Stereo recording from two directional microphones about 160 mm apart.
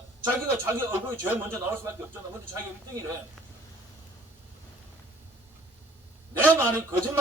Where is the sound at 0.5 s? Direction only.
15° right (ahead or behind).